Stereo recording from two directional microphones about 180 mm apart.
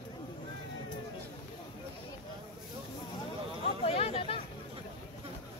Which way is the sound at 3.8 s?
35° left (ahead or behind).